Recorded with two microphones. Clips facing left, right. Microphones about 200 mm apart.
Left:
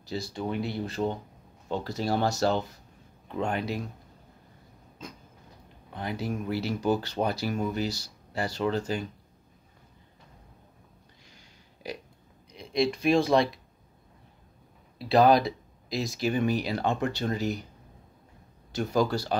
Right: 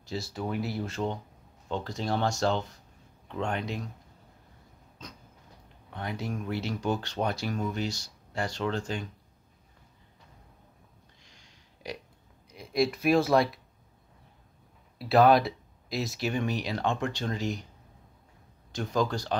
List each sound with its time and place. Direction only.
0.0 s speech: centre (ahead or behind)
5.9 s speech: 5° left (ahead or behind)
11.2 s a sound: 5° left (ahead or behind)
12.5 s speech: 5° right (ahead or behind)
15.0 s speech: centre (ahead or behind)
18.7 s speech: 10° left (ahead or behind)